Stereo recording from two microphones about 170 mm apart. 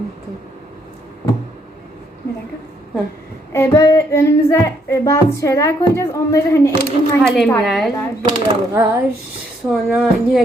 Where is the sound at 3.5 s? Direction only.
15° left (ahead or behind).